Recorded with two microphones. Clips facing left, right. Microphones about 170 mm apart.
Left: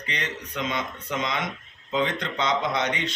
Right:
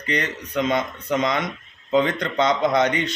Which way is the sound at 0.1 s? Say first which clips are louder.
Right 8 dB; 45° right (ahead or behind).